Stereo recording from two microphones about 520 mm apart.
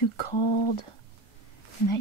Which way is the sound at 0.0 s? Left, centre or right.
Left.